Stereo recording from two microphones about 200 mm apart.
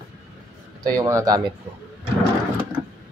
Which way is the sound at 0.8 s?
15° right (ahead or behind).